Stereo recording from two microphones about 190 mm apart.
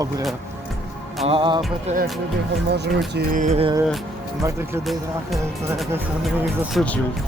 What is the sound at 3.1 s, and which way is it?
Speech, 45° right (ahead or behind).